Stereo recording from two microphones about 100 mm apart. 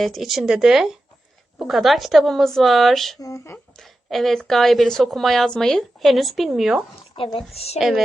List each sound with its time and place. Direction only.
0.0 s a woman's voice: centre (ahead or behind)
3.2 s speech: 30° left (ahead or behind)
3.8 s a woman's voice: centre (ahead or behind)
7.2 s speech: 65° left (ahead or behind)
7.5 s a woman's voice: 90° left
7.8 s a woman's voice: centre (ahead or behind)